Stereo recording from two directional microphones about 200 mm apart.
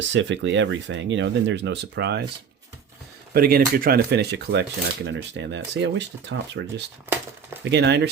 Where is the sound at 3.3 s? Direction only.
45° right (ahead or behind).